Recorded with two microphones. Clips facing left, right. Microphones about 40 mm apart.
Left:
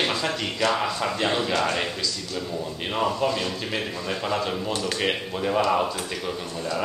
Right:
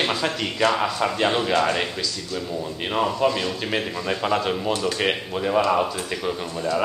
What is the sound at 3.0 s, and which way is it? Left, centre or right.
Speech, centre.